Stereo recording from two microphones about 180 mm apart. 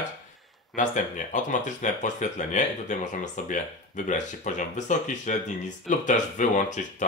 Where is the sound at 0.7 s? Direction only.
45° left (ahead or behind).